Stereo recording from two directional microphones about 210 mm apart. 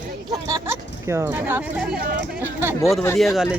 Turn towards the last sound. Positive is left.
turn(degrees=0)  # may be behind; listen again after turning